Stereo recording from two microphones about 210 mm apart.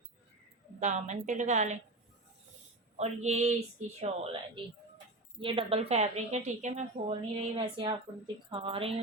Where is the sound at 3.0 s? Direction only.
30° right (ahead or behind).